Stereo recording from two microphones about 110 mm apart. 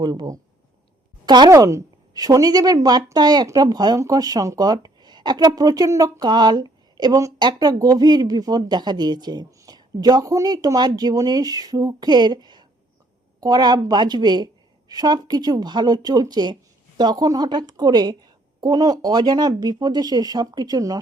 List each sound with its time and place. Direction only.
0.0 s a woman's voice: 40° right (ahead or behind)
1.5 s a woman's voice: 30° right (ahead or behind)